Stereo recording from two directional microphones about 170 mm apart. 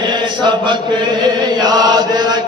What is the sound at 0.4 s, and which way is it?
Chant, 25° right (ahead or behind).